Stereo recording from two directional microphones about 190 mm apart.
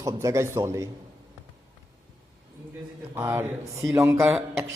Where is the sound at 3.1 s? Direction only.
10° right (ahead or behind).